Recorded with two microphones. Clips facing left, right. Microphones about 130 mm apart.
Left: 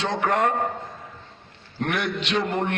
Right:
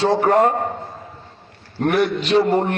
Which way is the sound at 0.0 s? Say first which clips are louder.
Right 7 dB; 35° right (ahead or behind).